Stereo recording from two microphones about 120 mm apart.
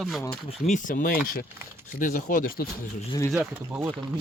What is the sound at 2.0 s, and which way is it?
Speech, 90° left.